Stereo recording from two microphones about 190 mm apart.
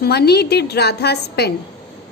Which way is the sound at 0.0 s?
60° left (ahead or behind).